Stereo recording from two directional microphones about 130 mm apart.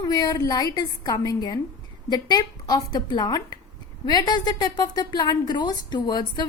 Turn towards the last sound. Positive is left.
turn(degrees=35)  # may be behind; listen again after turning